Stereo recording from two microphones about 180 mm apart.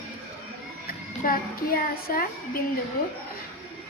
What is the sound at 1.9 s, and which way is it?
Child singing, 55° left (ahead or behind).